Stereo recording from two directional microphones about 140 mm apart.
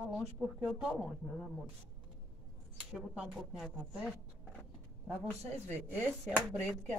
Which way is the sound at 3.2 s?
Centre (ahead or behind).